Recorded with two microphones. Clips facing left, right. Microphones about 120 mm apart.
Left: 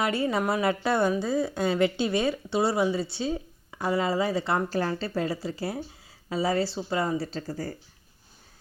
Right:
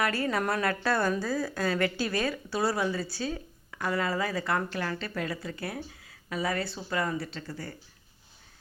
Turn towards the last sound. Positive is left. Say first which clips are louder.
# left 6 dB
turn(degrees=40)  # may be behind; listen again after turning